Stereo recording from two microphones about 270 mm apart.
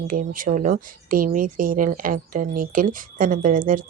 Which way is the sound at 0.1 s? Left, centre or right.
Right.